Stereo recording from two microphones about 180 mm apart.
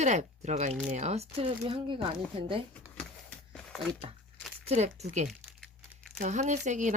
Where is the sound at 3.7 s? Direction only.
Centre (ahead or behind).